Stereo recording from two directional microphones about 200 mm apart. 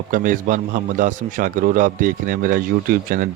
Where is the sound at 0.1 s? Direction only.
40° right (ahead or behind).